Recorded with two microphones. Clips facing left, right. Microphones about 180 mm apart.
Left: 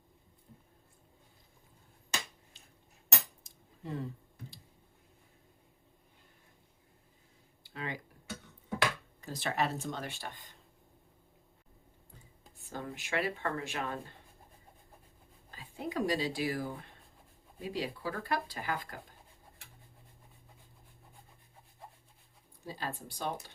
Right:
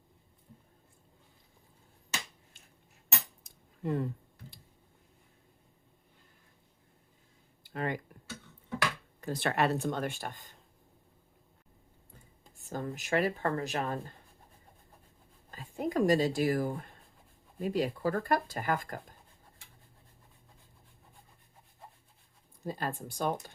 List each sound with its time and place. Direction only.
3.4 s cutlery: 55° right (ahead or behind)
7.6 s speech: 50° right (ahead or behind)
9.2 s speech: 60° right (ahead or behind); by 10.5 s 45° right (ahead or behind)
12.6 s speech: 45° right (ahead or behind)
15.4 s speech: 45° right (ahead or behind)
22.6 s speech: 50° right (ahead or behind)